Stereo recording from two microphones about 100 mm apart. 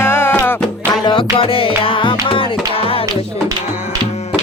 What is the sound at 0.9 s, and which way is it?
Music, 50° left (ahead or behind).